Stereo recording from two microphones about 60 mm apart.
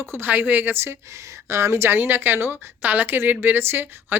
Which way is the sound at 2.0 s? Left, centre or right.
Right.